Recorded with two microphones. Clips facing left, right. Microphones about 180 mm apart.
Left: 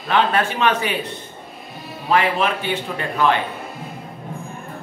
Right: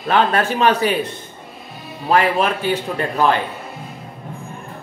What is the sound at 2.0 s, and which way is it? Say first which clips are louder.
A man's voice: right 2 dB; 40° right (ahead or behind).